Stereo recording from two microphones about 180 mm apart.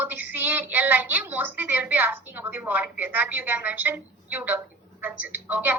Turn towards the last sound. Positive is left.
turn(degrees=-10)  # may be behind; listen again after turning